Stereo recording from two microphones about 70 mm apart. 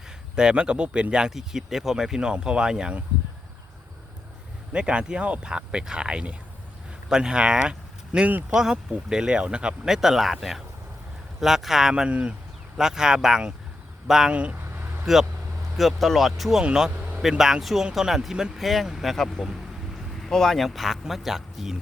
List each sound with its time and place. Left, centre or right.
0.3 s speech: centre
4.7 s speech: centre
14.5 s vehicle: right
15.0 s speech: centre